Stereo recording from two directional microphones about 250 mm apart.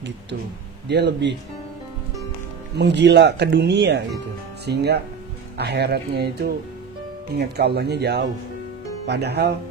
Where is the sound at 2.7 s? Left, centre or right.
Right.